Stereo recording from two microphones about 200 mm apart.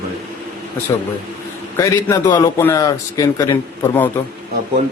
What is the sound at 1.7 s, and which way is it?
A man's voice, 15° left (ahead or behind).